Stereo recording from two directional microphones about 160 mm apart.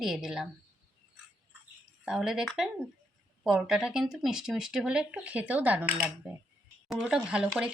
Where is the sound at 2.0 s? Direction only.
5° right (ahead or behind).